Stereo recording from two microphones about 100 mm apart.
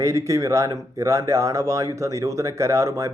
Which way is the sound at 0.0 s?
30° right (ahead or behind).